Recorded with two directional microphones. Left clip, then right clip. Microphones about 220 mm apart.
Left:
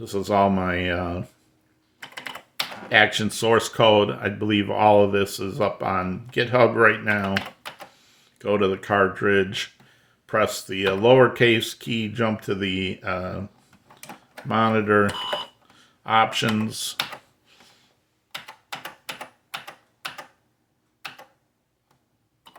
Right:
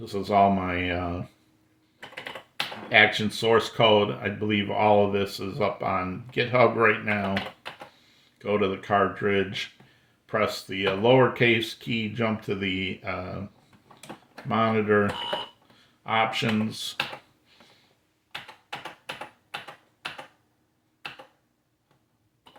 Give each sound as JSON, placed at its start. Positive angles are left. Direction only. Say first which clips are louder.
{"t": 0.0, "sound": "speech", "louder": "left 1 dB", "side_deg": 35}
{"t": 2.9, "sound": "speech", "louder": "left 1 dB", "side_deg": 40}
{"t": 14.4, "sound": "speech", "louder": "left 3 dB", "side_deg": 40}
{"t": 16.0, "sound": "speech", "louder": "left 5 dB", "side_deg": 40}